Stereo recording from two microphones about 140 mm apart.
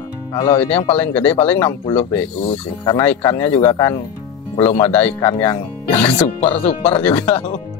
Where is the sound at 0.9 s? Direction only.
15° left (ahead or behind).